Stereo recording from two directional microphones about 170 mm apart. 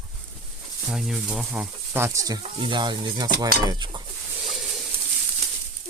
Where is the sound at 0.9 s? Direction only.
Centre (ahead or behind); by 4.0 s 25° right (ahead or behind).